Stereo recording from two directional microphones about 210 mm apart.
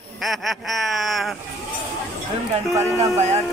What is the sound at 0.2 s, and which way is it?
Speech, centre (ahead or behind).